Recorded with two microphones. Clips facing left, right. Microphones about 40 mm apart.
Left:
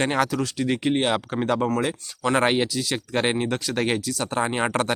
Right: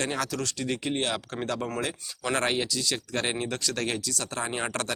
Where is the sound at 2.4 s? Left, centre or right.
Left.